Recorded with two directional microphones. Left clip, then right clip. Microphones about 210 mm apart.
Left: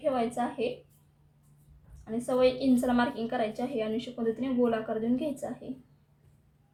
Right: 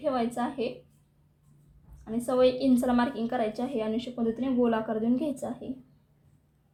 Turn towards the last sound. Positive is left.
turn(degrees=-25)  # may be behind; listen again after turning